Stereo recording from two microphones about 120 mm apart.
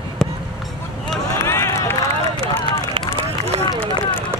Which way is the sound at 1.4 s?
20° left (ahead or behind).